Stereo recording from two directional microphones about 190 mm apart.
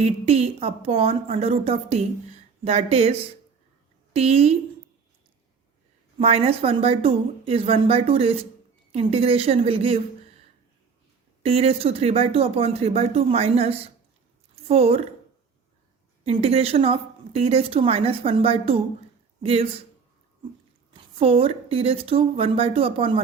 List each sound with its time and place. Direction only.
0.0 s a woman's voice: 35° right (ahead or behind)
6.1 s a woman's voice: 30° right (ahead or behind)
11.4 s a woman's voice: 30° right (ahead or behind)
16.2 s a woman's voice: 30° right (ahead or behind)
20.9 s a woman's voice: 30° right (ahead or behind)